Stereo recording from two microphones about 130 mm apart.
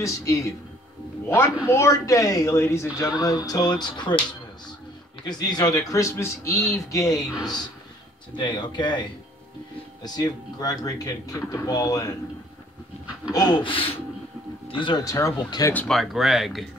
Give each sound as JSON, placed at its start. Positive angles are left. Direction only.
{"t": 0.0, "sound": "speech", "side_deg": 25}
{"t": 1.7, "sound": "speech", "side_deg": 20}
{"t": 5.2, "sound": "speech", "side_deg": 30}
{"t": 7.2, "sound": "speech", "side_deg": 5}
{"t": 8.4, "sound": "speech", "side_deg": 35}
{"t": 10.0, "sound": "speech", "side_deg": 30}
{"t": 13.3, "sound": "speech", "side_deg": 30}
{"t": 15.9, "sound": "speech", "side_deg": 0}